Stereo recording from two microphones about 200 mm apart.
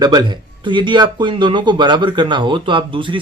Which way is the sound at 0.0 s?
20° right (ahead or behind).